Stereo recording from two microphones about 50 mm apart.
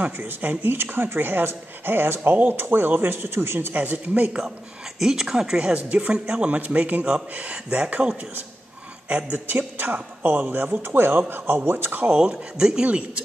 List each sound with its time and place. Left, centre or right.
0.2 s speech: right
3.7 s speech: right
4.9 s speech: centre
6.5 s a man's voice: right
9.3 s speech: right
12.1 s a man's voice: centre